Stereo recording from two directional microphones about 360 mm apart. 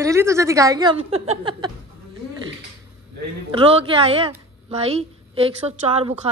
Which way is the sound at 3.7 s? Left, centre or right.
Centre.